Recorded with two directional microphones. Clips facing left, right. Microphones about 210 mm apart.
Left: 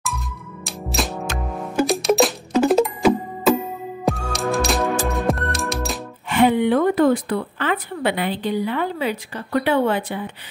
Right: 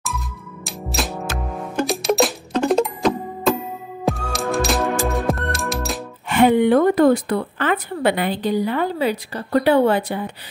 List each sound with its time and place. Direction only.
0.7 s music: centre (ahead or behind)
6.2 s a woman's voice: 45° right (ahead or behind)